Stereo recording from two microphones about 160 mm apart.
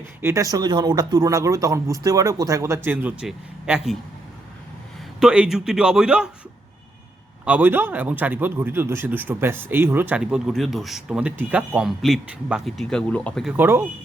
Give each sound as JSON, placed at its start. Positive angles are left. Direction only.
{"t": 0.2, "sound": "speech", "side_deg": -15}
{"t": 5.2, "sound": "a man's voice", "side_deg": -5}
{"t": 7.4, "sound": "speech", "side_deg": -10}
{"t": 13.5, "sound": "speech", "side_deg": -15}